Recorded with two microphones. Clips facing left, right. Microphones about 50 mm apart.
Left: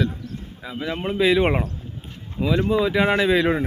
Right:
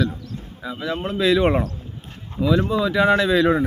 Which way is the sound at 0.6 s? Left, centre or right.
Centre.